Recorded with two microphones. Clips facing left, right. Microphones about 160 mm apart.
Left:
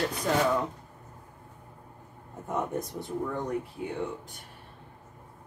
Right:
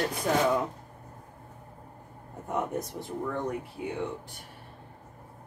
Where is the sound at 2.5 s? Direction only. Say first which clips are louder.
Even; centre (ahead or behind).